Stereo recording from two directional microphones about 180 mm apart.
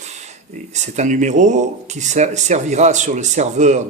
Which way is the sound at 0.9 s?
40° right (ahead or behind).